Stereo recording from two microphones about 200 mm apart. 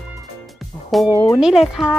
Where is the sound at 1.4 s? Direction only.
Centre (ahead or behind).